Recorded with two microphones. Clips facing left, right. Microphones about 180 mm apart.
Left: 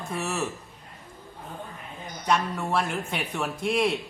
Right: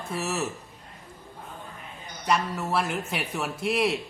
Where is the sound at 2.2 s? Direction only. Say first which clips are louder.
Left 1 dB; 5° right (ahead or behind).